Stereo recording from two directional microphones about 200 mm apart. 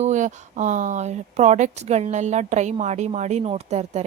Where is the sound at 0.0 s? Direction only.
35° right (ahead or behind).